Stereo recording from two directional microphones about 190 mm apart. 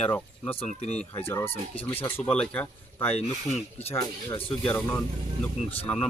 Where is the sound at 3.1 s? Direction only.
35° left (ahead or behind).